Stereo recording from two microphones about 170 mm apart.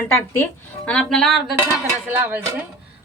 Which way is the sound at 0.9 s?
5° left (ahead or behind).